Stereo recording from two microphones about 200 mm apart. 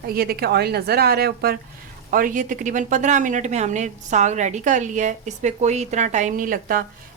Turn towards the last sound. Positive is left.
turn(degrees=-45)  # may be behind; listen again after turning